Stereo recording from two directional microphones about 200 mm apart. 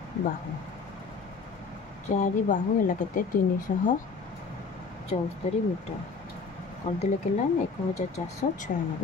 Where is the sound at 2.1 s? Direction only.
40° left (ahead or behind).